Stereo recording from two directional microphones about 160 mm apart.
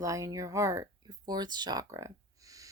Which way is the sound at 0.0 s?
20° right (ahead or behind).